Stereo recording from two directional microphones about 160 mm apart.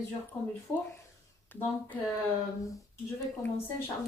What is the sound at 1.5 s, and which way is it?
Speech, 10° left (ahead or behind).